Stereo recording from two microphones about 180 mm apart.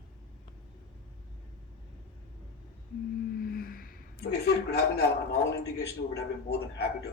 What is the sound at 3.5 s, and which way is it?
A man's voice, 55° left (ahead or behind).